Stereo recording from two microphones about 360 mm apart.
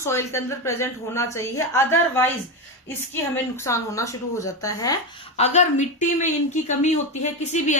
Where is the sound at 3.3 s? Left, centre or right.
Centre.